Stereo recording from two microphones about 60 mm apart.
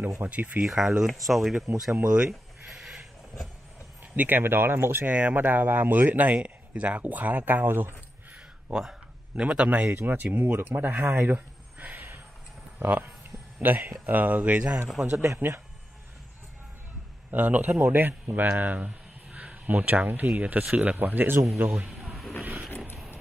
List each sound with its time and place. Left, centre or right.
0.2 s speech: right
0.7 s speech: centre
2.0 s a sound: centre
4.2 s speech: right
5.0 s speech: right
9.3 s speech: centre; by 10.8 s right
11.1 s a sound: right
12.7 s speech: right
15.0 s speech: centre
15.3 s speech: right
17.3 s speech: right